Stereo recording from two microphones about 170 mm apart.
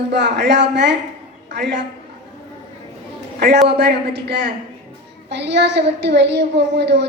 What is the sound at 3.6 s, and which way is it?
A woman's voice, 80° right.